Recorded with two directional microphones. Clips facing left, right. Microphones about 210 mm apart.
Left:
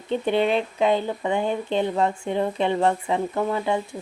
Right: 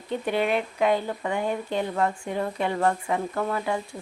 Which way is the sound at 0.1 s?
25° left (ahead or behind).